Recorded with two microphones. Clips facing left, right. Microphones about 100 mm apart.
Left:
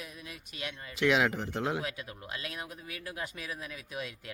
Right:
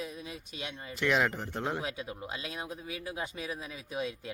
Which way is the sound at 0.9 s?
5° left (ahead or behind).